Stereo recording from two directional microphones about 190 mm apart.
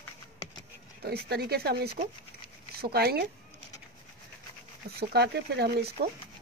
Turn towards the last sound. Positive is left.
turn(degrees=-60)  # may be behind; listen again after turning